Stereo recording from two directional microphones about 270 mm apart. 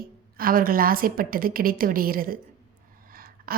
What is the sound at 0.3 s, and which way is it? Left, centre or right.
A woman's voice, right.